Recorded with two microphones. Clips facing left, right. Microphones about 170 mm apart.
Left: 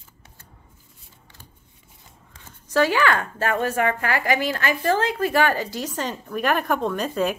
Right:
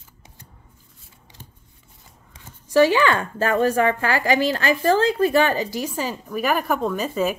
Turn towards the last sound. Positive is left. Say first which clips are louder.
# right 1 dB
turn(degrees=-5)  # may be behind; listen again after turning